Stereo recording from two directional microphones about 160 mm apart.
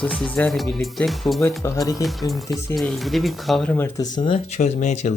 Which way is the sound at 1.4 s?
20° left (ahead or behind).